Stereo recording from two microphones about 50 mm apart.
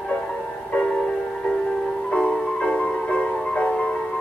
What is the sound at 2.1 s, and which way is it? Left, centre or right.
Music, centre.